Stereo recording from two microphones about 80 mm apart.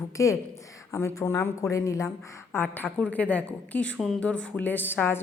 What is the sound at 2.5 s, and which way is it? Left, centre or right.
Speech, left.